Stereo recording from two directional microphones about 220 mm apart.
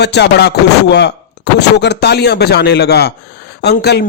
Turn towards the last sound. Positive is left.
turn(degrees=50)  # may be behind; listen again after turning